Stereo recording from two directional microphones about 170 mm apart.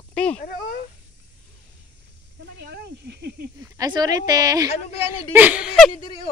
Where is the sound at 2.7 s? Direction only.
75° right (ahead or behind).